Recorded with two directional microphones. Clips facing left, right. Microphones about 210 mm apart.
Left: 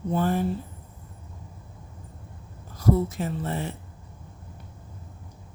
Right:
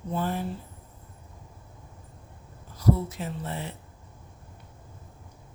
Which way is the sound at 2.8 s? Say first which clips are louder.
Left 3 dB; 50° left (ahead or behind).